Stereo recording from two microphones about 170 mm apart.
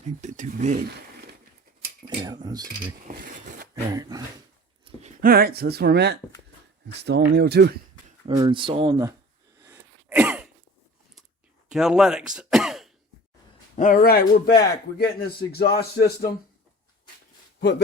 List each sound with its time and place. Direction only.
0.2 s speech: 45° right (ahead or behind)
2.0 s speech: 25° right (ahead or behind)
3.1 s speech: 50° right (ahead or behind)
3.9 s speech: 20° right (ahead or behind)
4.9 s a sound: 40° right (ahead or behind)
5.2 s speech: 65° right (ahead or behind)
8.4 s speech: 30° right (ahead or behind)
9.6 s cough: 15° right (ahead or behind)
11.7 s speech: 5° right (ahead or behind)
13.7 s a man's voice: 50° left (ahead or behind); by 16.3 s 65° left (ahead or behind)